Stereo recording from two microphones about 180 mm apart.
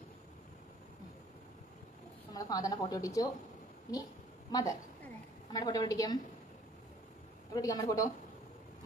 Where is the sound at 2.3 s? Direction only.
20° left (ahead or behind).